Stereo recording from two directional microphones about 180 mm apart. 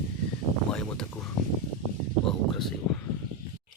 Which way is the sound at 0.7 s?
5° left (ahead or behind).